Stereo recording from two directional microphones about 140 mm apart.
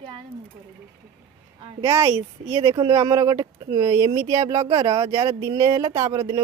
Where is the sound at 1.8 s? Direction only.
20° right (ahead or behind).